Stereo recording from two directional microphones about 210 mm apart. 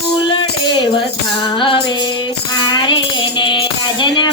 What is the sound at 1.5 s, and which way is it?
Music, 25° left (ahead or behind).